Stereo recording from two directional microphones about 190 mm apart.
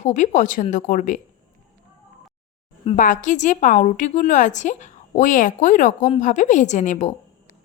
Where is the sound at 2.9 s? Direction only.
45° left (ahead or behind).